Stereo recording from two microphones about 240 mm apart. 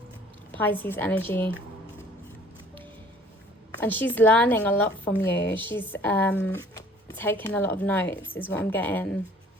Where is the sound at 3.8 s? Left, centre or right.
Centre.